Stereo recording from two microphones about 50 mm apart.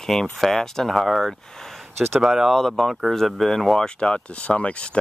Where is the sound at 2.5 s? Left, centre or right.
Centre.